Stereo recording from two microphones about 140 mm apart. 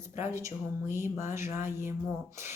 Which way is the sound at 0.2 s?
20° right (ahead or behind).